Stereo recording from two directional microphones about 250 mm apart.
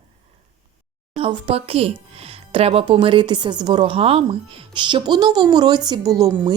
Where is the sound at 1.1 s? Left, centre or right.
Right.